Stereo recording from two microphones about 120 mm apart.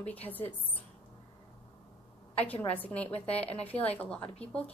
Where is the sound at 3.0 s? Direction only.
60° left (ahead or behind).